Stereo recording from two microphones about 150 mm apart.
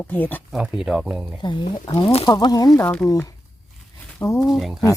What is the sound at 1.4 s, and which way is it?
Speech, 30° left (ahead or behind).